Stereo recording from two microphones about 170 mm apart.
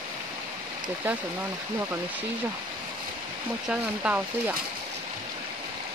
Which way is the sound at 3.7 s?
10° right (ahead or behind).